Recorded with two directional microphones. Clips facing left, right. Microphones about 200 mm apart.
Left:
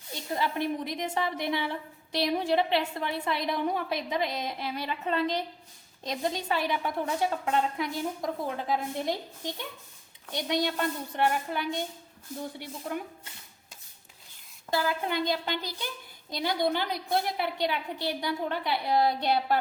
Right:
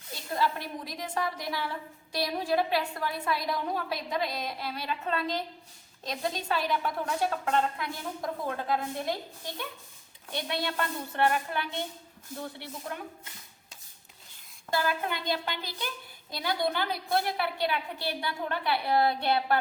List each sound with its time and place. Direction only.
0.3 s a woman's voice: 20° left (ahead or behind)
14.7 s a woman's voice: 10° left (ahead or behind)